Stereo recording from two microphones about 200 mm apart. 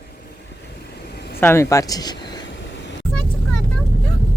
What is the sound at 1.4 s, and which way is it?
Speech, 10° left (ahead or behind).